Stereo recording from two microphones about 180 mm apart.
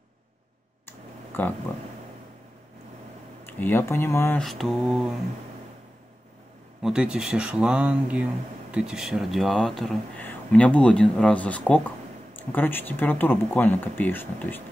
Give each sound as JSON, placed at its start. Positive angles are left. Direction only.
{"t": 0.8, "sound": "clicking", "side_deg": 10}
{"t": 3.4, "sound": "speech", "side_deg": 10}
{"t": 4.4, "sound": "speech", "side_deg": 0}
{"t": 6.8, "sound": "speech", "side_deg": -5}